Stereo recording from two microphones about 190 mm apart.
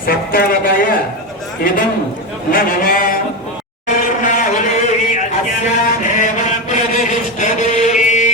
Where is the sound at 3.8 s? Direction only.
45° left (ahead or behind).